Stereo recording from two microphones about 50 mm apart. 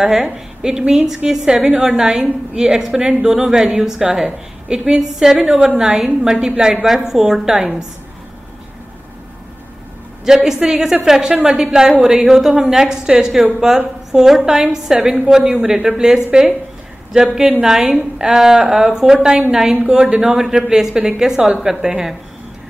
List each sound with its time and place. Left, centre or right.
0.0 s a woman's voice: centre
10.2 s a woman's voice: centre